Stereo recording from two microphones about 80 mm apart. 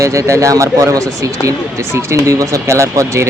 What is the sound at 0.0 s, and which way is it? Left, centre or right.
Speech, right.